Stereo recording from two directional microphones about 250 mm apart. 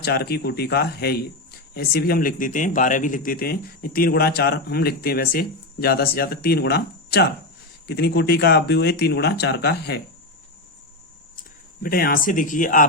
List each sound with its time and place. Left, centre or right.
0.0 s speech: left
11.3 s speech: left